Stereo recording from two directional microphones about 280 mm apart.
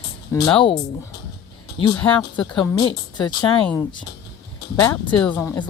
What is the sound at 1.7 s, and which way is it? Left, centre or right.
Speech, centre.